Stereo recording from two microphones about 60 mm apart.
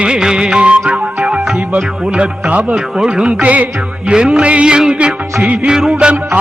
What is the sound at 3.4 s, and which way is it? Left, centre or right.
Music, right.